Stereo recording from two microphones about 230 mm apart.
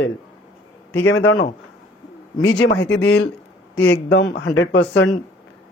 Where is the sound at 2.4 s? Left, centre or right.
Left.